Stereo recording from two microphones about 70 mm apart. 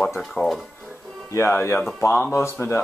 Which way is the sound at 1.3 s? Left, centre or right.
Left.